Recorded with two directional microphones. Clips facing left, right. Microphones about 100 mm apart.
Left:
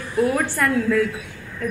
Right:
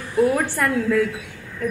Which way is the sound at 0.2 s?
20° right (ahead or behind).